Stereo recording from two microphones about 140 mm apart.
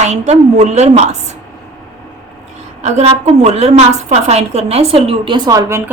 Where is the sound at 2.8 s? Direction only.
50° right (ahead or behind).